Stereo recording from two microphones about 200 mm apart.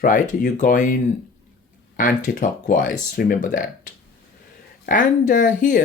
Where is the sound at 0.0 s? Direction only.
40° left (ahead or behind).